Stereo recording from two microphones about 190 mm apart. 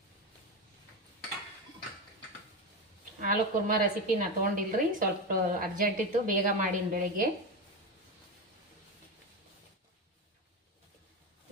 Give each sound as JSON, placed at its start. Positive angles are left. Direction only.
{"t": 3.2, "sound": "a woman's voice", "side_deg": -45}